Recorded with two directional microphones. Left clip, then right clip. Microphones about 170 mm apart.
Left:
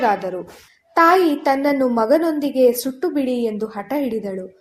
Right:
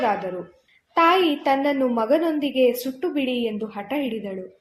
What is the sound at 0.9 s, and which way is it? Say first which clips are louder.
A woman's voice: left 4 dB; 40° left (ahead or behind).